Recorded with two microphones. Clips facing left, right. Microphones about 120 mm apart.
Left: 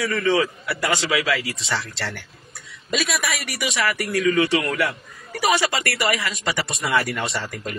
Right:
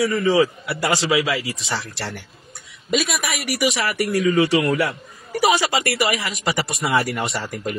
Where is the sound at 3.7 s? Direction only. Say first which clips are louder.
Right 2 dB; 25° right (ahead or behind).